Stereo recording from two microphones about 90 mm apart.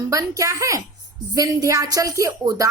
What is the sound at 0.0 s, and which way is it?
Speech, 35° right (ahead or behind).